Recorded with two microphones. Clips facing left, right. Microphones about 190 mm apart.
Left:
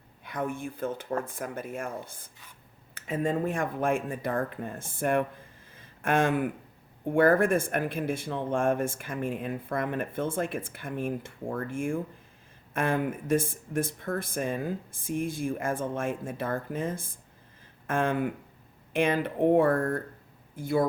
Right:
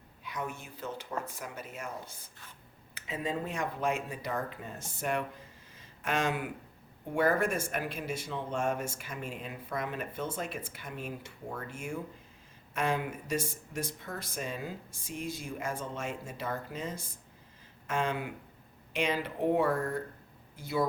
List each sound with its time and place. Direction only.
0.3 s speech: 55° left (ahead or behind)